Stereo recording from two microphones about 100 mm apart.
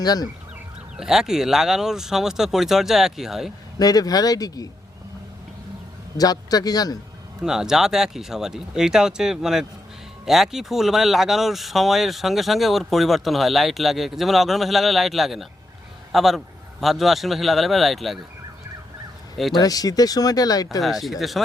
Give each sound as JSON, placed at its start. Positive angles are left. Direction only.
{"t": 0.0, "sound": "speech", "side_deg": 40}
{"t": 0.9, "sound": "speech", "side_deg": -5}
{"t": 3.8, "sound": "speech", "side_deg": 40}
{"t": 6.1, "sound": "speech", "side_deg": 40}
{"t": 7.4, "sound": "speech", "side_deg": -5}
{"t": 19.5, "sound": "speech", "side_deg": 40}
{"t": 20.8, "sound": "speech", "side_deg": 0}